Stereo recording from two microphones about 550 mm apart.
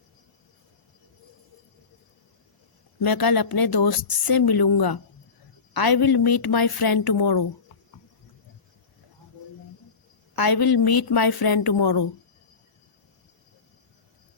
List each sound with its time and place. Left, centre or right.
3.0 s a woman's voice: left
10.3 s a woman's voice: left